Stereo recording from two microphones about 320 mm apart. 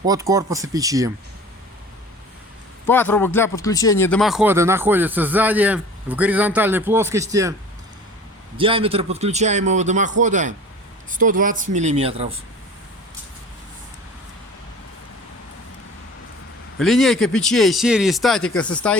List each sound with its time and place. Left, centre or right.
0.0 s speech: centre
2.8 s speech: centre
8.5 s speech: centre
16.7 s speech: centre